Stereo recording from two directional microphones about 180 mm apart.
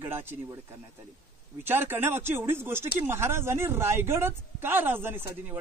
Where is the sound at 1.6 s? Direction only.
10° right (ahead or behind).